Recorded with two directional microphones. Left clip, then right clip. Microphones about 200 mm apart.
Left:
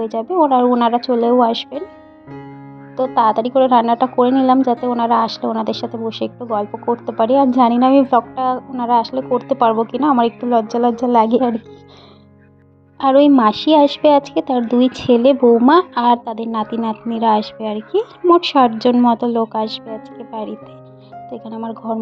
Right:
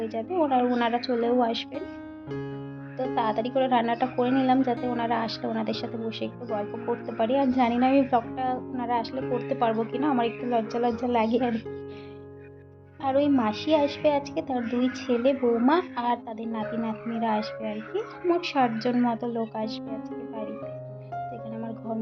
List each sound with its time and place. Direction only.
0.0 s speech: 30° left (ahead or behind)
3.0 s speech: 30° left (ahead or behind)
13.0 s a woman's voice: 45° left (ahead or behind)